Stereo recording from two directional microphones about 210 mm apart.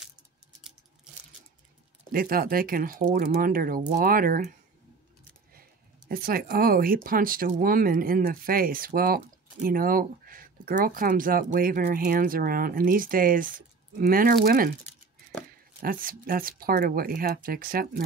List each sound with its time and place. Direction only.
2.1 s speech: 45° right (ahead or behind)
6.0 s speech: 45° right (ahead or behind)
15.8 s speech: 45° right (ahead or behind)